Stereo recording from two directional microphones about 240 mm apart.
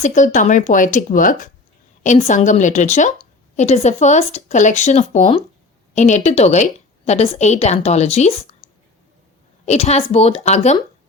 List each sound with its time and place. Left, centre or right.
0.0 s a woman's voice: left